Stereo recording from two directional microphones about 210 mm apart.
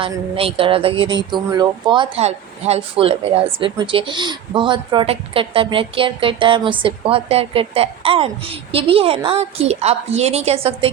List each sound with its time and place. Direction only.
0.0 s speech: 25° right (ahead or behind)